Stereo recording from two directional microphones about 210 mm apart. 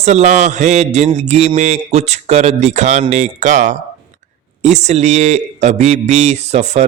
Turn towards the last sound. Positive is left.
turn(degrees=-30)  # may be behind; listen again after turning